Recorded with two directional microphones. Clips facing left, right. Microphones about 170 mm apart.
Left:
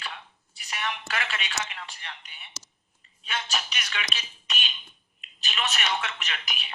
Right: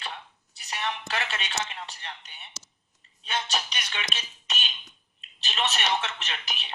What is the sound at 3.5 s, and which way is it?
Speech, 35° right (ahead or behind).